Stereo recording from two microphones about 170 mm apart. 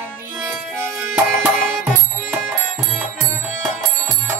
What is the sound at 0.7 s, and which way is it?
Music, 5° right (ahead or behind).